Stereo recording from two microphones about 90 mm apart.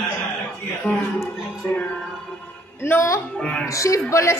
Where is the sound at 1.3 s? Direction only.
15° left (ahead or behind).